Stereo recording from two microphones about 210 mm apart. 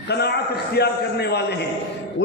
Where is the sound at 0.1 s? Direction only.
50° left (ahead or behind).